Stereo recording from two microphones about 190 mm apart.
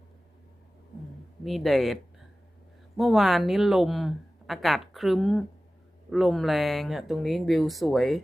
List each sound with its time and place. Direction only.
1.5 s a woman's voice: centre (ahead or behind)
3.0 s a woman's voice: centre (ahead or behind)